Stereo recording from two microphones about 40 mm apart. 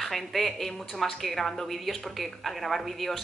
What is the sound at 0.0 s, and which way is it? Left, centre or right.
Speech, centre.